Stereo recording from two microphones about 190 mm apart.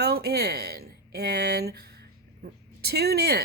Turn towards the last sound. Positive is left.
turn(degrees=-55)  # may be behind; listen again after turning